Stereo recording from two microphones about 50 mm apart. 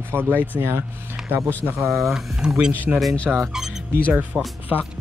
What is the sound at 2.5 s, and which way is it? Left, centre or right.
Speech, centre.